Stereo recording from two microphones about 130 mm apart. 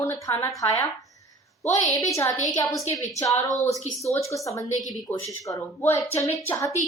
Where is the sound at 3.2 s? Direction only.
25° left (ahead or behind).